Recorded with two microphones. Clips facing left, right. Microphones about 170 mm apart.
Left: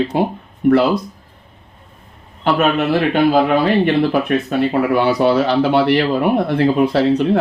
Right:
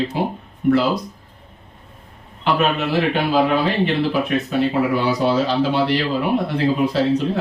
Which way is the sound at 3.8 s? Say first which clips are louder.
Left 4 dB; 55° left (ahead or behind).